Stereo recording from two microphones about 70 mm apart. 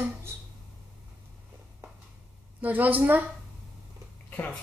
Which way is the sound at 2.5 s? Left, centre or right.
Right.